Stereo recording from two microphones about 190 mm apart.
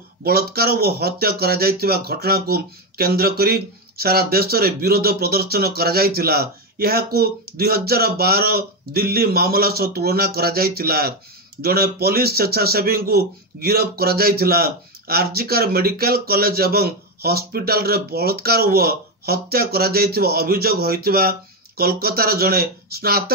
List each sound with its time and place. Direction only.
0.2 s a man's voice: 55° right (ahead or behind)